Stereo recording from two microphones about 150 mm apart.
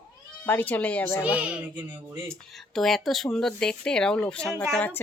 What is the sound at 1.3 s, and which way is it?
Speech, 10° right (ahead or behind).